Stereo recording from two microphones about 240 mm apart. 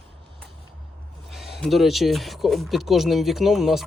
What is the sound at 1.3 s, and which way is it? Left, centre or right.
Speech, centre.